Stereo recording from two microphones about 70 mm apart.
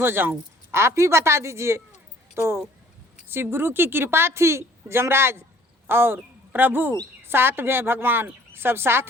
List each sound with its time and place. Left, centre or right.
0.0 s a woman's voice: right